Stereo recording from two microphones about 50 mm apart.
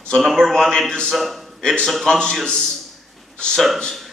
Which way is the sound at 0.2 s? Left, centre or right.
Centre.